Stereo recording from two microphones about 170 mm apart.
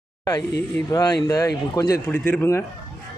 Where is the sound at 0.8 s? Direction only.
20° left (ahead or behind).